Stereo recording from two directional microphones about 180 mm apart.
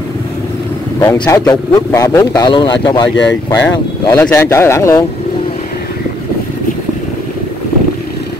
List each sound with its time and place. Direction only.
1.0 s speech: 20° left (ahead or behind)